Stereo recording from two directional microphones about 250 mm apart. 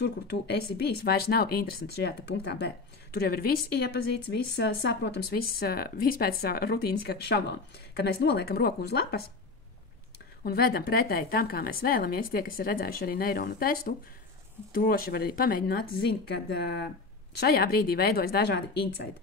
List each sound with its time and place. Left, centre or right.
0.0 s speech: left
10.4 s speech: left